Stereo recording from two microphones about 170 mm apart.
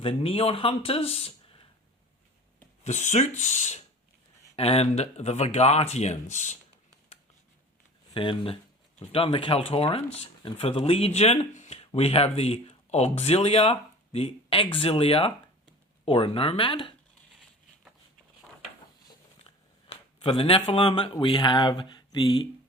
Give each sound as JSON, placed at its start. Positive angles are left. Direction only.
{"t": 0.0, "sound": "speech", "side_deg": 35}
{"t": 2.8, "sound": "speech", "side_deg": 45}
{"t": 8.1, "sound": "speech", "side_deg": 30}
{"t": 19.0, "sound": "a sound", "side_deg": 35}